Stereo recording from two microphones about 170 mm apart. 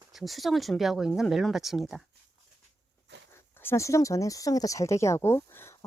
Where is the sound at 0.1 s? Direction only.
Centre (ahead or behind).